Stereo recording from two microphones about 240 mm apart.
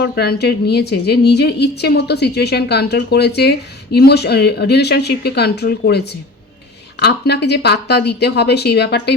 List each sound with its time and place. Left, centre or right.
0.0 s a woman's voice: left
7.0 s a woman's voice: left